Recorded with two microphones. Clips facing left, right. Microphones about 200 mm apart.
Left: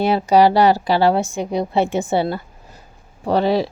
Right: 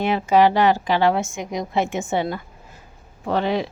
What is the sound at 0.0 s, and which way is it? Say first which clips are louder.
A woman's voice: left 3 dB; 35° left (ahead or behind).